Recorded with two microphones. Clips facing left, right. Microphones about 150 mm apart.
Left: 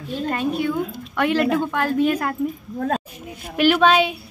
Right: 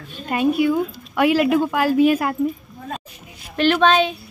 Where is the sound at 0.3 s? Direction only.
10° right (ahead or behind).